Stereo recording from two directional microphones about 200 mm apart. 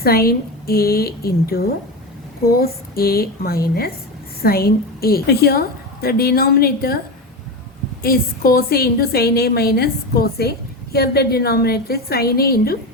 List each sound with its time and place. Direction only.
0.0 s a woman's voice: 50° left (ahead or behind)
8.0 s a woman's voice: 50° left (ahead or behind)